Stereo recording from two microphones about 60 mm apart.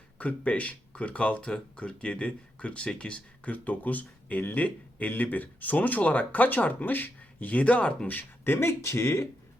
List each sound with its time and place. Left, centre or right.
0.2 s speech: left
8.1 s speech: left